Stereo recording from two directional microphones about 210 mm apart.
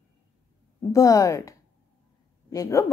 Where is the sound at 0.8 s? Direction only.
15° left (ahead or behind).